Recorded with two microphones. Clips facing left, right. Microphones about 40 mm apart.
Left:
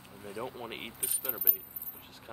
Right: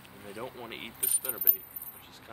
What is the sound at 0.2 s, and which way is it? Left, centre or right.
Speech, centre.